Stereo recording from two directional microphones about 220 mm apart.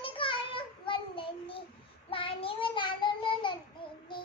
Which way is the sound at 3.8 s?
20° left (ahead or behind).